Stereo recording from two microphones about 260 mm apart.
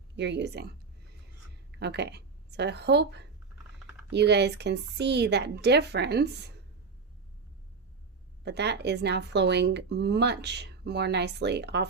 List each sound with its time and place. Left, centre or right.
0.2 s speech: right
1.8 s speech: right
8.4 s speech: right